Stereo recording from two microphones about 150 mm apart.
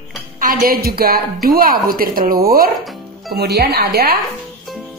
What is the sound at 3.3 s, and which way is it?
Speech, 90° right.